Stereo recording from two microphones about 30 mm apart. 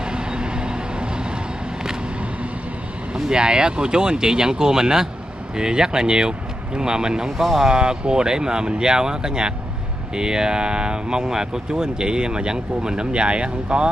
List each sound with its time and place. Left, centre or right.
0.0 s vehicle: right
3.3 s speech: right
7.2 s speech: centre
7.6 s speech: right